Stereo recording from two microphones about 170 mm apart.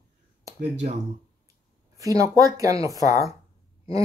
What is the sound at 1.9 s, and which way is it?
Speech, 20° right (ahead or behind).